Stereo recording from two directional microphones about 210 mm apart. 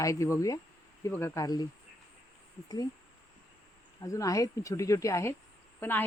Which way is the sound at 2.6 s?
15° left (ahead or behind).